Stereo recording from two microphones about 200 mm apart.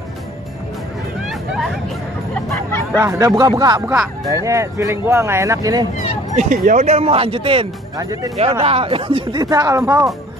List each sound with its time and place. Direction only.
1.5 s hubbub: centre (ahead or behind)
2.3 s music: 5° left (ahead or behind)
3.0 s speech: 15° right (ahead or behind)
6.3 s speech: 40° right (ahead or behind); by 10.1 s 15° right (ahead or behind)